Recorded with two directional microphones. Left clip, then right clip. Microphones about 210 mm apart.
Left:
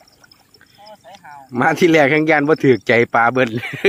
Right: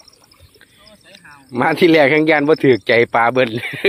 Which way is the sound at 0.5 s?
15° left (ahead or behind).